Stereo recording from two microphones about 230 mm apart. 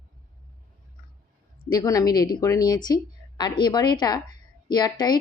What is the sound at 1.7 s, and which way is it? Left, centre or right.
Speech, centre.